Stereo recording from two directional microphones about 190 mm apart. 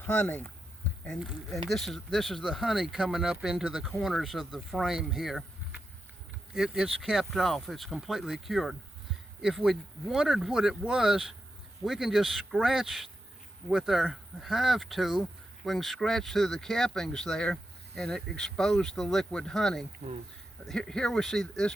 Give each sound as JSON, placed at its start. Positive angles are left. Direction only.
{"t": 0.0, "sound": "speech", "side_deg": 10}
{"t": 20.0, "sound": "speech", "side_deg": -25}
{"t": 20.7, "sound": "speech", "side_deg": 5}